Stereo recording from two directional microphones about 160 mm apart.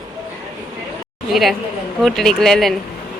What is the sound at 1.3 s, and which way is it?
Speech, centre (ahead or behind).